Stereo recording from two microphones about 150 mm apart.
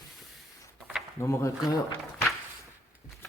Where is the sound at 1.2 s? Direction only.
20° left (ahead or behind).